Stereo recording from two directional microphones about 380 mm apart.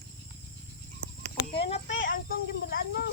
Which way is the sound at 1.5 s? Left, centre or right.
Centre.